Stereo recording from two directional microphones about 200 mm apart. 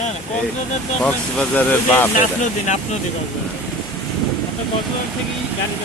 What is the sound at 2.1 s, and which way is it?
Speech, 40° left (ahead or behind).